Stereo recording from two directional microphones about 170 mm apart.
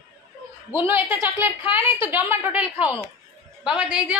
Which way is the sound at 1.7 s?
10° right (ahead or behind).